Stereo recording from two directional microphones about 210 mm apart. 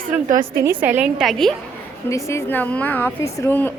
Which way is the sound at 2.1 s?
15° left (ahead or behind).